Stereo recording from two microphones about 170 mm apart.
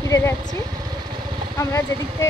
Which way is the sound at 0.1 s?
15° left (ahead or behind).